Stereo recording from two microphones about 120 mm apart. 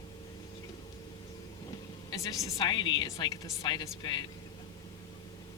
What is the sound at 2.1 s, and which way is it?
A man's voice, 30° left (ahead or behind).